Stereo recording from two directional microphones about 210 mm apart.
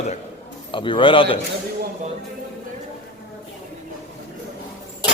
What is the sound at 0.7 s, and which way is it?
Speech, 25° left (ahead or behind).